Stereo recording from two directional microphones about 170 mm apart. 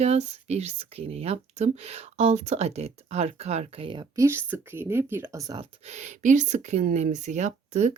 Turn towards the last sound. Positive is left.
turn(degrees=-45)  # may be behind; listen again after turning